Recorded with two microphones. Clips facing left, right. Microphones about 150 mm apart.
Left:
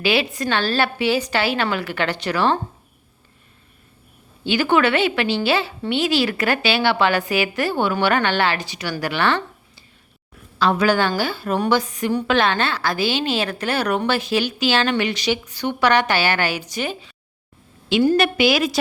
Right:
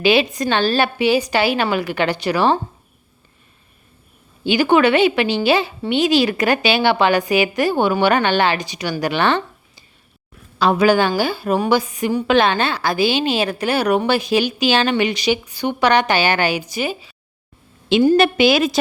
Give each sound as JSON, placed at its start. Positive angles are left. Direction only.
{"t": 0.0, "sound": "a woman's voice", "side_deg": -20}
{"t": 4.4, "sound": "a woman's voice", "side_deg": -15}
{"t": 17.8, "sound": "a woman's voice", "side_deg": -20}